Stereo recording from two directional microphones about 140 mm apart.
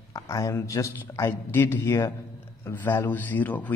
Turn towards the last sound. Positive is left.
turn(degrees=10)  # may be behind; listen again after turning